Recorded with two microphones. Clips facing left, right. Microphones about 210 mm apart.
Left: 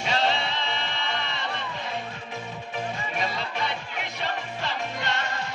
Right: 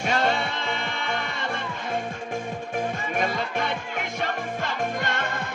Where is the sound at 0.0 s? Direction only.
50° right (ahead or behind).